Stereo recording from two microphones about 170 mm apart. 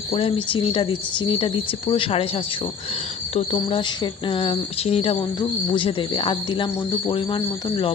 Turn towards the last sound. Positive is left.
turn(degrees=30)  # may be behind; listen again after turning